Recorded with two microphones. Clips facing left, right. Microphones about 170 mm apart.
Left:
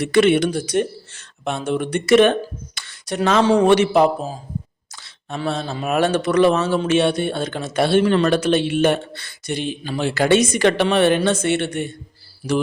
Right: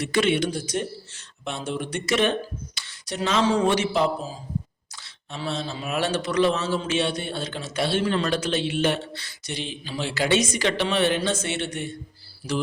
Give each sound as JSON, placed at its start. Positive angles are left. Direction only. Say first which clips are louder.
{"t": 0.0, "sound": "a man's voice", "louder": "left 7 dB", "side_deg": 60}